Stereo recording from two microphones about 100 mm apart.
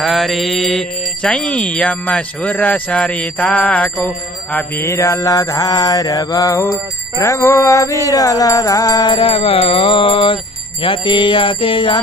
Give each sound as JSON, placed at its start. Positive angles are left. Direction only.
{"t": 0.0, "sound": "speech", "side_deg": 0}